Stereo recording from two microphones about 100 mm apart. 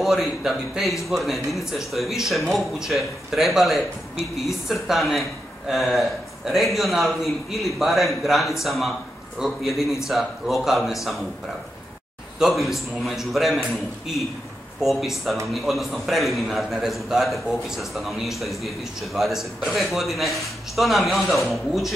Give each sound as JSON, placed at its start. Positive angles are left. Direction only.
{"t": 0.0, "sound": "a man's voice", "side_deg": 0}
{"t": 12.4, "sound": "a man's voice", "side_deg": 0}